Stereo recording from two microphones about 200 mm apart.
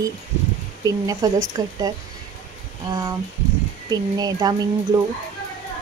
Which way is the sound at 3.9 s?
20° right (ahead or behind).